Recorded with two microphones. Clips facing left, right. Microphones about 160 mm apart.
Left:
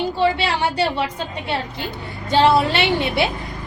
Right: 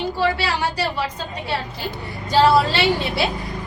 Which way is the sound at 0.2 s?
25° left (ahead or behind).